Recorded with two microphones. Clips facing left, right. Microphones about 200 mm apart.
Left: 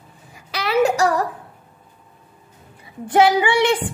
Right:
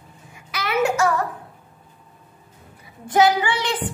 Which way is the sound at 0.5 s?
35° left (ahead or behind).